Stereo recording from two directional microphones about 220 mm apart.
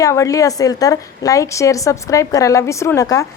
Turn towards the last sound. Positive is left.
turn(degrees=15)  # may be behind; listen again after turning